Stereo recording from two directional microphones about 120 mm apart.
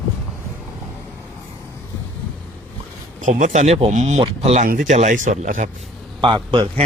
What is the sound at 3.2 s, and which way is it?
Speech, 90° right.